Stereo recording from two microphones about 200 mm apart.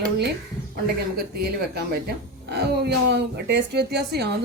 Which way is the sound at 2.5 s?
55° right (ahead or behind).